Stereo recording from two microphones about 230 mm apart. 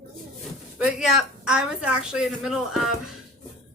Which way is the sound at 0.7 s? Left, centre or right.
Centre.